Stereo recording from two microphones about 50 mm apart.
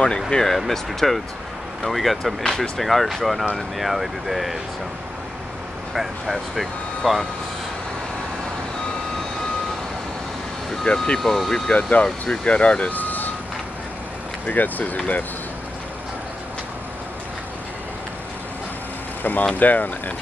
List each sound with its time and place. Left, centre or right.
0.3 s speech: centre
2.4 s speech: centre
2.8 s speech: centre
5.9 s speech: centre
10.9 s speech: left
11.2 s speech: centre
11.7 s speech: left
12.9 s vehicle: left
14.4 s speech: left
19.2 s speech: left